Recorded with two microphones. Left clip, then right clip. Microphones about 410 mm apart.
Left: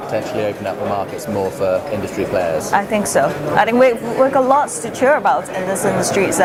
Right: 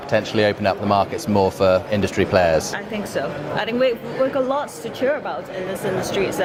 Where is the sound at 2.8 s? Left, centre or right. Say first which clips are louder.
Left 10 dB; left.